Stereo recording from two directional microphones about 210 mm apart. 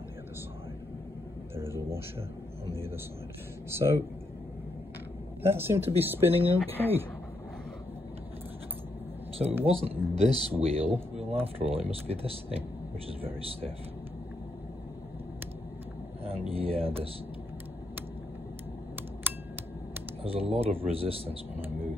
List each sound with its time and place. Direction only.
1.6 s a sound: 10° right (ahead or behind)
3.7 s speech: 10° right (ahead or behind)
5.4 s speech: 10° right (ahead or behind)
9.7 s speech: 30° right (ahead or behind)
16.3 s speech: 25° right (ahead or behind)
20.2 s speech: 30° right (ahead or behind)